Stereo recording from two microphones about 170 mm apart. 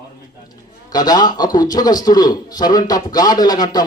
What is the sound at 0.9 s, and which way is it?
Speech, 20° left (ahead or behind).